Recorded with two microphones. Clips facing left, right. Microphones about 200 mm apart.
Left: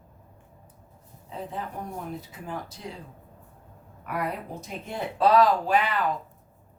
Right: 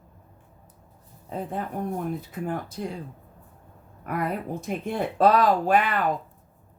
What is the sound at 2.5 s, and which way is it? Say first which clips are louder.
Speech: right 4 dB; 55° right (ahead or behind).